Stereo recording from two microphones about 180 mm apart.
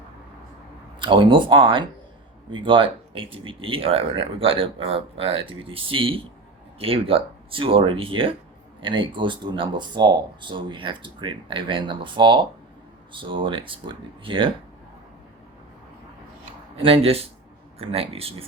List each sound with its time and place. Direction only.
0.9 s speech: 25° right (ahead or behind)
16.7 s speech: 35° right (ahead or behind)